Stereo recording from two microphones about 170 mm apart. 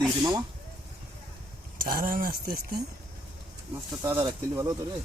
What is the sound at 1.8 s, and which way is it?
Speech, 55° right (ahead or behind).